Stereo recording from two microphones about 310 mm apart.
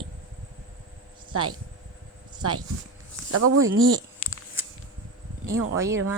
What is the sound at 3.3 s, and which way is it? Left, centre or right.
Speech, right.